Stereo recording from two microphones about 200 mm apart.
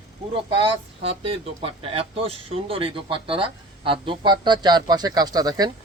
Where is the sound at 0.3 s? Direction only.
25° right (ahead or behind).